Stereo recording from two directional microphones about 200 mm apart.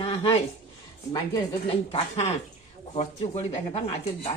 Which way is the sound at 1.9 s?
30° left (ahead or behind).